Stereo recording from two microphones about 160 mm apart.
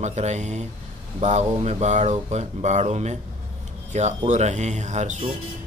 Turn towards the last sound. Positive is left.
turn(degrees=-45)  # may be behind; listen again after turning